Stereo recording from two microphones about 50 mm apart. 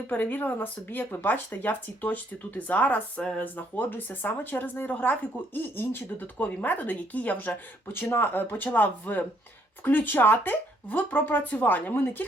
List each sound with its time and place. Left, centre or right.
0.1 s speech: left
5.7 s speech: left
6.4 s speech: left
7.9 s speech: left